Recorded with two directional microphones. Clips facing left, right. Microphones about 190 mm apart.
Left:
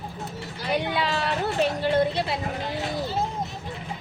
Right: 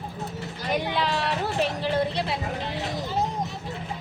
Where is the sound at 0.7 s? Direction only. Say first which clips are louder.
Even; centre (ahead or behind).